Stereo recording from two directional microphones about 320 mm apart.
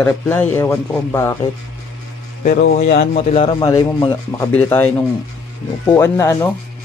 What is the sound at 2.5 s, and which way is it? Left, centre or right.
Speech, left.